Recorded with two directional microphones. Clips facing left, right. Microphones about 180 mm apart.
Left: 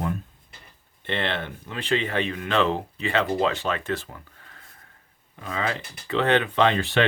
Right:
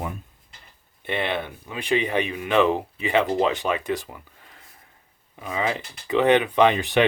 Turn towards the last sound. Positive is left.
turn(degrees=-15)  # may be behind; listen again after turning